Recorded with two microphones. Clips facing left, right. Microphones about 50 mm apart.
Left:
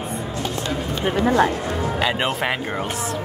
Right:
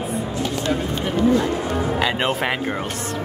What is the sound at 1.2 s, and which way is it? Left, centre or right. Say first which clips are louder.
Speech: left 1 dB; left.